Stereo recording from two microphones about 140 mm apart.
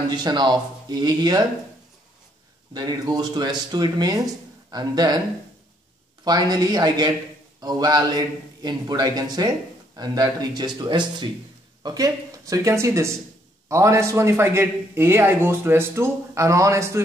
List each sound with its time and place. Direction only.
0.1 s speech: 30° right (ahead or behind)
2.7 s a man's voice: 30° right (ahead or behind)
6.2 s a man's voice: 30° right (ahead or behind)